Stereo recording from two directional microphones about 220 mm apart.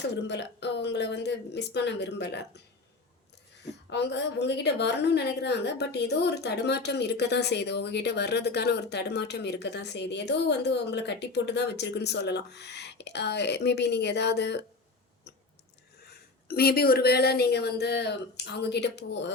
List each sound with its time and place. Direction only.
0.3 s a woman's voice: 50° left (ahead or behind)
3.8 s a woman's voice: 50° left (ahead or behind)
16.5 s a woman's voice: 45° left (ahead or behind)